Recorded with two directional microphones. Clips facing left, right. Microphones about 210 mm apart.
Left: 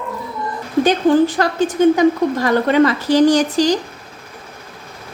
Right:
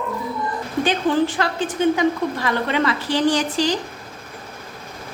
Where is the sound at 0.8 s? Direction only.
40° left (ahead or behind).